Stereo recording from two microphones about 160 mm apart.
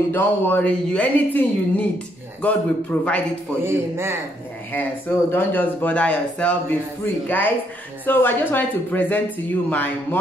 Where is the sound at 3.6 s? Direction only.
15° right (ahead or behind).